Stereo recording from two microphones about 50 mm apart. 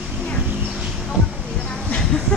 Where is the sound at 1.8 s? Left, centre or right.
Centre.